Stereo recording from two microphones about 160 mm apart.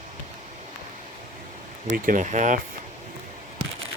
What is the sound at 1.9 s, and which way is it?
Speech, 55° right (ahead or behind).